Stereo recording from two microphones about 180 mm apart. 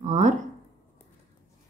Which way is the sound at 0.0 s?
40° right (ahead or behind).